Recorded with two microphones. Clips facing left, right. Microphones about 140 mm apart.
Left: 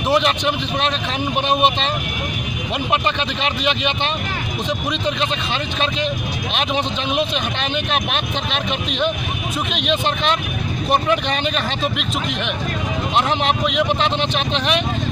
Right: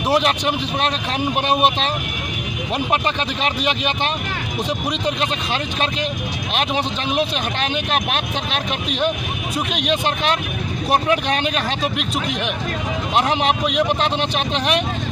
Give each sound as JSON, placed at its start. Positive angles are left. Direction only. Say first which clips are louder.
{"t": 0.1, "sound": "speech", "louder": "left 1 dB", "side_deg": -5}
{"t": 3.4, "sound": "speech", "louder": "even", "side_deg": -5}
{"t": 9.7, "sound": "speech", "louder": "even", "side_deg": -5}
{"t": 13.1, "sound": "speech", "louder": "right 1 dB", "side_deg": -5}